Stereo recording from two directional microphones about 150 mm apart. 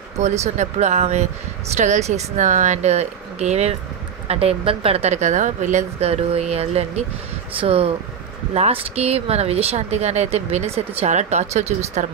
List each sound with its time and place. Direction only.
0.2 s speech: 50° right (ahead or behind)